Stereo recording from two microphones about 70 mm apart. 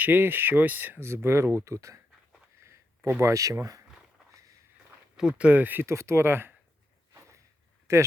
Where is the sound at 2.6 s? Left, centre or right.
Right.